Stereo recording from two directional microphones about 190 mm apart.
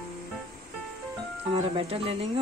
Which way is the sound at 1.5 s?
30° right (ahead or behind).